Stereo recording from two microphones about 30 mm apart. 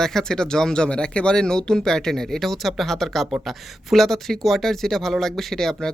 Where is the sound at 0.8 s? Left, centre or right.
Left.